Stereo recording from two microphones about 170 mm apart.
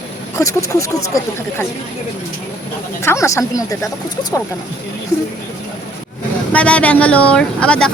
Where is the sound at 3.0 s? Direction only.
15° left (ahead or behind).